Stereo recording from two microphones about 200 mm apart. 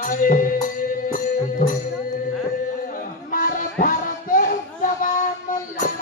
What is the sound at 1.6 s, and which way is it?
Speech, 40° left (ahead or behind).